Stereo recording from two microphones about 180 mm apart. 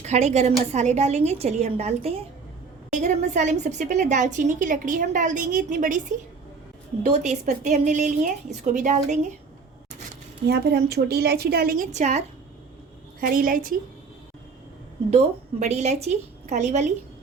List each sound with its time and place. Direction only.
0.0 s a woman's voice: 40° right (ahead or behind)
10.4 s a woman's voice: 65° right (ahead or behind); by 12.2 s 40° right (ahead or behind)
13.1 s a woman's voice: 55° right (ahead or behind)
15.1 s a woman's voice: 40° right (ahead or behind)